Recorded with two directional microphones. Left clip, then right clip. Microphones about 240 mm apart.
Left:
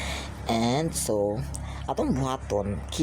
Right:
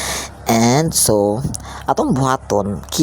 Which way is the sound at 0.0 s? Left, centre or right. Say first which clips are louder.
Right 10 dB; right.